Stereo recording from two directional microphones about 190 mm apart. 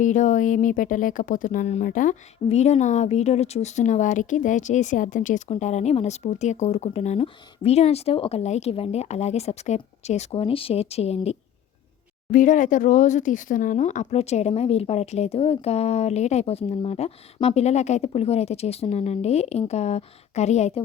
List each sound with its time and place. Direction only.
0.0 s speech: 40° left (ahead or behind)
12.3 s speech: 45° left (ahead or behind)